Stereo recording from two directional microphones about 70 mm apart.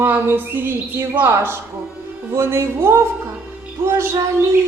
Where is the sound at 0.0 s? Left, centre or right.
Right.